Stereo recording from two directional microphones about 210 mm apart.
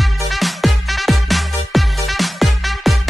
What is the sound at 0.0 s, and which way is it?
Music, centre (ahead or behind).